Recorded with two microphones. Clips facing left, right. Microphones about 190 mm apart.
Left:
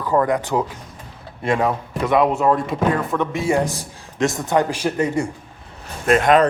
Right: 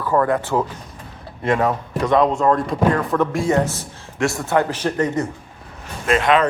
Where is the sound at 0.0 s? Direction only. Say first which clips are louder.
Even; 15° left (ahead or behind).